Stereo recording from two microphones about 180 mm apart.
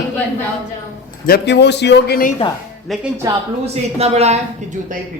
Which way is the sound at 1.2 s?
65° left (ahead or behind).